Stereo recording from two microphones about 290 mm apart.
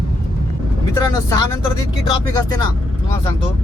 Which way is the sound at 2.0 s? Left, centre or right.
Centre.